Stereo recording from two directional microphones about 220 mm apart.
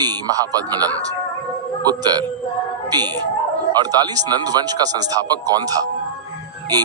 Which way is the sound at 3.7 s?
20° right (ahead or behind).